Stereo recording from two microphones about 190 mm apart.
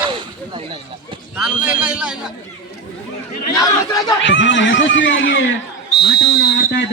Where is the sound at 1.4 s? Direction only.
5° right (ahead or behind).